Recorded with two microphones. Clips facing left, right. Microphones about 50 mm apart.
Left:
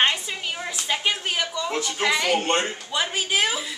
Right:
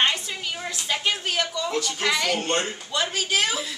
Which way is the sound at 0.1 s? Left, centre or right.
Centre.